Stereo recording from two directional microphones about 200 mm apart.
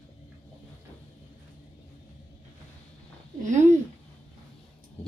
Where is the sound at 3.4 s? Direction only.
35° right (ahead or behind).